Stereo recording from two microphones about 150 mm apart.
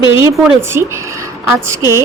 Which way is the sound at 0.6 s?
15° right (ahead or behind).